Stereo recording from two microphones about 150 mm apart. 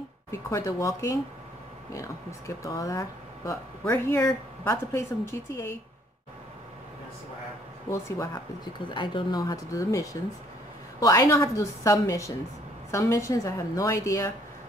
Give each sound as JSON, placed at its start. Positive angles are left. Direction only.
{"t": 0.3, "sound": "speech", "side_deg": 20}
{"t": 8.7, "sound": "speech", "side_deg": 30}